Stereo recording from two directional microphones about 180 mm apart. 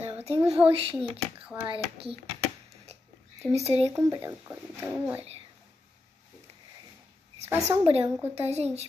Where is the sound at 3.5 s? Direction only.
35° right (ahead or behind).